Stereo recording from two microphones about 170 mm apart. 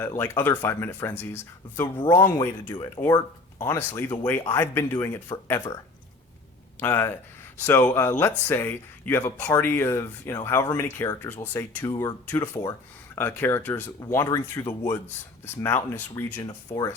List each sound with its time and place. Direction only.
0.0 s speech: 15° left (ahead or behind)
3.0 s speech: 30° left (ahead or behind)
3.6 s speech: 15° left (ahead or behind)
6.7 s speech: 15° left (ahead or behind)